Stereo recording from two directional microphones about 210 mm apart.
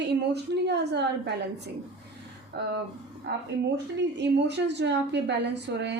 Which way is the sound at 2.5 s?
50° right (ahead or behind).